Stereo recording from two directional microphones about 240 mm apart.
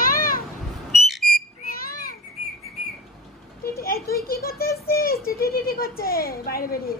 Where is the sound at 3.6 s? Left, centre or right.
Left.